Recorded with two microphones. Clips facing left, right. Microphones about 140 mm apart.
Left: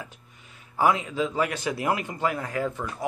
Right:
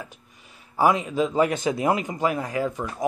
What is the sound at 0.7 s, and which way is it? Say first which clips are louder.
Speech: right 3 dB; 15° right (ahead or behind).